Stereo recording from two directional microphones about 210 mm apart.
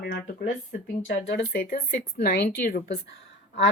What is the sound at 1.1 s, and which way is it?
A woman's voice, 55° left (ahead or behind).